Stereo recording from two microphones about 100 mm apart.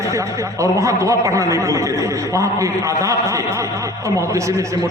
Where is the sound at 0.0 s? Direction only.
30° right (ahead or behind).